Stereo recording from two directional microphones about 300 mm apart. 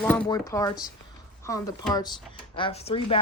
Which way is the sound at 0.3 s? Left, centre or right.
Centre.